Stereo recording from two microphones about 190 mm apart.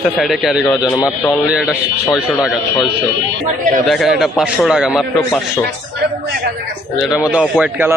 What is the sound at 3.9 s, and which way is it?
A man's voice, centre (ahead or behind).